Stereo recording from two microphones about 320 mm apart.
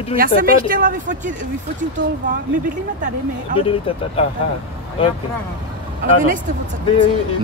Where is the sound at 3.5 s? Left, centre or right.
Right.